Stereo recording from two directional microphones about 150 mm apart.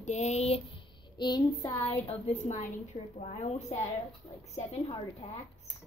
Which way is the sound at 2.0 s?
50° left (ahead or behind).